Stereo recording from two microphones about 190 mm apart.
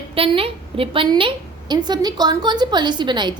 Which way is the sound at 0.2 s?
30° right (ahead or behind).